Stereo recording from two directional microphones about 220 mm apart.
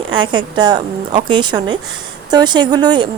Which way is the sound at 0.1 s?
20° right (ahead or behind).